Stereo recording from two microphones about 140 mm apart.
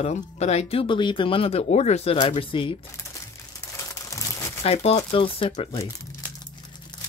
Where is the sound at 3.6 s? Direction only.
20° left (ahead or behind).